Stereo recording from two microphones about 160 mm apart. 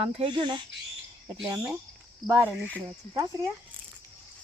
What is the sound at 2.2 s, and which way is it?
Speech, 15° right (ahead or behind).